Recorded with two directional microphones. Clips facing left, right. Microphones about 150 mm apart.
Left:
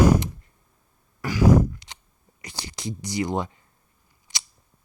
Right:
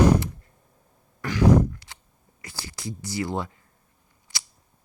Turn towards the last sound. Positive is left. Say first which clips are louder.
# left 1 dB
turn(degrees=20)  # may be behind; listen again after turning